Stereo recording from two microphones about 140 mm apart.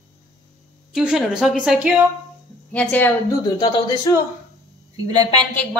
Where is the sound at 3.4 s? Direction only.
30° left (ahead or behind).